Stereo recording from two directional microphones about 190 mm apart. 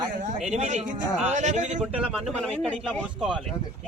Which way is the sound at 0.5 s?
35° right (ahead or behind).